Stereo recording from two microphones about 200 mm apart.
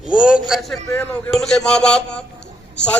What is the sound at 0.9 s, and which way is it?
A man's voice, 10° left (ahead or behind).